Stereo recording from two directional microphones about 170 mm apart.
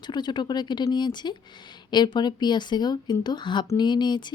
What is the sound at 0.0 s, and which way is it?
Speech, 25° left (ahead or behind).